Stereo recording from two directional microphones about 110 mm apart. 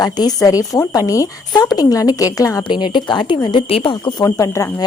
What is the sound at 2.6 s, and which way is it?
Speech, 45° left (ahead or behind).